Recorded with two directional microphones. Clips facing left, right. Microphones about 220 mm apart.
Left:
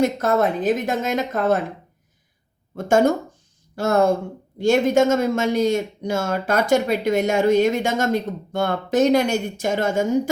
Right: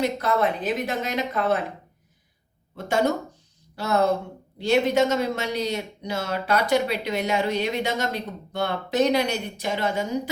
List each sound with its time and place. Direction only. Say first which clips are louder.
0.0 s speech: left 4 dB; 45° left (ahead or behind)
2.7 s speech: left 6 dB; 50° left (ahead or behind)